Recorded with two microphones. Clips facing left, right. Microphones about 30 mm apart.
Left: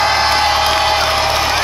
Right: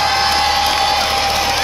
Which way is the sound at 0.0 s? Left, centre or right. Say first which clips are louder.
Left 2 dB; centre.